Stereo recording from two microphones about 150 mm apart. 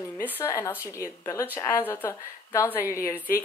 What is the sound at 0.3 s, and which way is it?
Speech, 20° left (ahead or behind).